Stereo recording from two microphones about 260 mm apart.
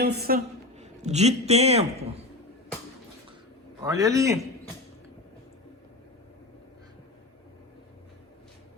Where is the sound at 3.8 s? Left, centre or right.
Centre.